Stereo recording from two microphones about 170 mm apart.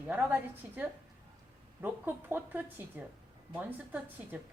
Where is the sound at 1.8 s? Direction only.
10° right (ahead or behind).